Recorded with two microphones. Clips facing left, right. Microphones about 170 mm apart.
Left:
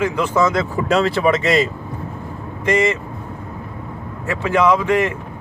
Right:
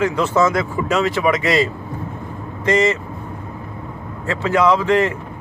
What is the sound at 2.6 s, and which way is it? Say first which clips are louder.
Speech: right 1 dB; 10° left (ahead or behind).